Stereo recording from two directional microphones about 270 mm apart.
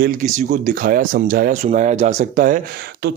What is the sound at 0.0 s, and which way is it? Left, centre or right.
Speech, right.